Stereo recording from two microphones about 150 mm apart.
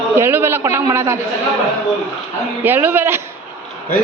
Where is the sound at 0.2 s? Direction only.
15° right (ahead or behind).